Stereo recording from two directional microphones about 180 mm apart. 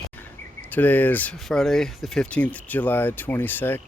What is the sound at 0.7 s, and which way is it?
Speech, 10° left (ahead or behind).